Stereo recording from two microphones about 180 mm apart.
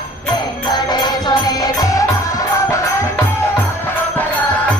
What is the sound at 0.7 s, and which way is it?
Music, 25° left (ahead or behind).